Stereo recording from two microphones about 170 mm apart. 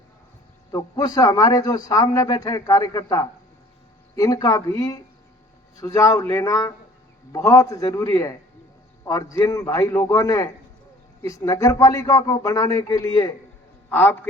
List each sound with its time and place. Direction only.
0.7 s a man's voice: 20° left (ahead or behind)
9.4 s a man's voice: 20° left (ahead or behind)